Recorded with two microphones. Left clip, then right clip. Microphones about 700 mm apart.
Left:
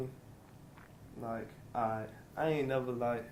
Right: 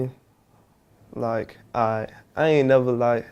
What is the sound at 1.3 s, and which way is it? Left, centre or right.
Speech, right.